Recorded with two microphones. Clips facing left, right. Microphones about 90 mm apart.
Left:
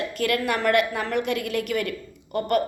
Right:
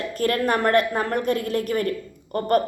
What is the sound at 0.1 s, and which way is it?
A woman's voice, 35° right (ahead or behind).